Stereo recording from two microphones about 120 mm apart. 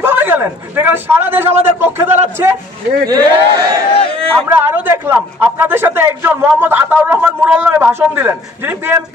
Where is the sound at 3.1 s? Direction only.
30° right (ahead or behind).